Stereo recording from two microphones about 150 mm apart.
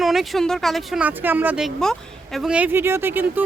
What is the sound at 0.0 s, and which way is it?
Speech, centre (ahead or behind).